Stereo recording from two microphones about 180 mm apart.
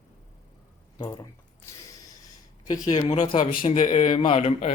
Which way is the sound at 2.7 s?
25° left (ahead or behind).